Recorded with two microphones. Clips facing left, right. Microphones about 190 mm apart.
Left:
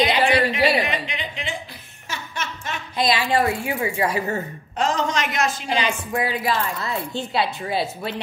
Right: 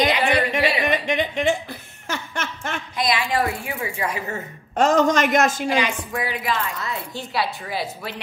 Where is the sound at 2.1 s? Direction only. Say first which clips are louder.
Right 2 dB; 55° right (ahead or behind).